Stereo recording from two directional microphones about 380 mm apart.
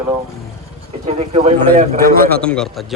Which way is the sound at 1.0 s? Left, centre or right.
Centre.